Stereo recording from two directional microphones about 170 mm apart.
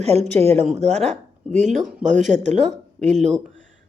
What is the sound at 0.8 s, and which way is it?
Speech, 40° right (ahead or behind).